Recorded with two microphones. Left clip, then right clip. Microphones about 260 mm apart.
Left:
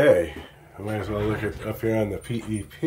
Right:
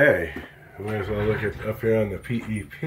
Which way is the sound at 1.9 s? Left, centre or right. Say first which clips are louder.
Right 3 dB; centre.